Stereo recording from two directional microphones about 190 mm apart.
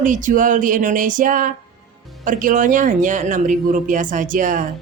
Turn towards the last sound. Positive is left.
turn(degrees=-45)  # may be behind; listen again after turning